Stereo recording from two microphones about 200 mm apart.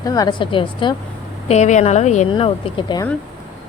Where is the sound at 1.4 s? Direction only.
35° left (ahead or behind).